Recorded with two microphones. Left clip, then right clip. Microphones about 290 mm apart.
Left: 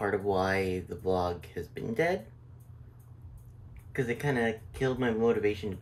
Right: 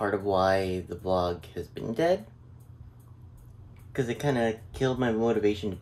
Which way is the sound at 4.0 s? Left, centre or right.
Centre.